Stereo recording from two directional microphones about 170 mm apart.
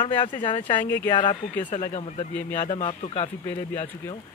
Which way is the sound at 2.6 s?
35° left (ahead or behind).